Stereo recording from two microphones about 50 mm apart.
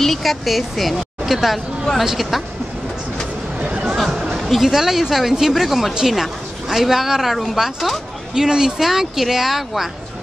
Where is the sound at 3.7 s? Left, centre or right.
Right.